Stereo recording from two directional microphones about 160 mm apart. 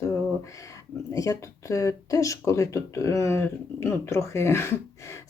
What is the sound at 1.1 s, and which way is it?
Speech, 20° left (ahead or behind).